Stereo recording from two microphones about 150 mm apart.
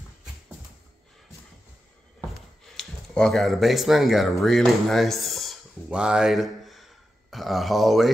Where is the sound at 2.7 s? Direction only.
5° left (ahead or behind).